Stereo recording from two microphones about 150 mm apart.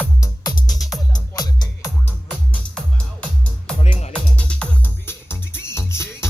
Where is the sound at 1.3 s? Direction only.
25° left (ahead or behind).